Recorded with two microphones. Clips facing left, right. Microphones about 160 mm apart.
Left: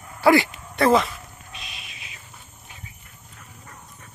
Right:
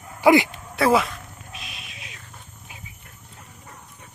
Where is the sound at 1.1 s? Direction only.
Centre (ahead or behind).